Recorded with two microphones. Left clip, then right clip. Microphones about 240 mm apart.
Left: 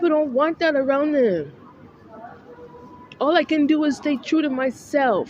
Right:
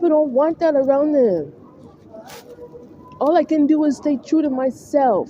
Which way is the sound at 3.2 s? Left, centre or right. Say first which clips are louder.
Right 3 dB; left.